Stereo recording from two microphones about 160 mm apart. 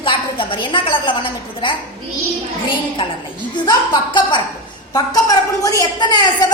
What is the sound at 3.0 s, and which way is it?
A woman's voice, 35° left (ahead or behind).